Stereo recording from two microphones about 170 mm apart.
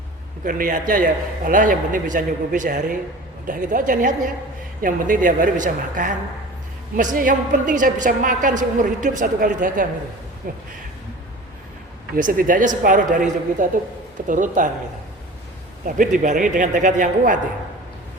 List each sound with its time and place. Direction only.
0.4 s a woman's voice: 55° right (ahead or behind)
12.1 s a woman's voice: 55° right (ahead or behind)
16.0 s a woman's voice: 50° right (ahead or behind)